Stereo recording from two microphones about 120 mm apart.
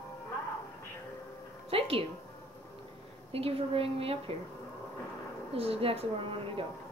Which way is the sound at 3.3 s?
55° right (ahead or behind).